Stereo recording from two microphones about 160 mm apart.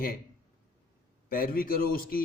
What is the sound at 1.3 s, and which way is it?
Speech, 65° left (ahead or behind).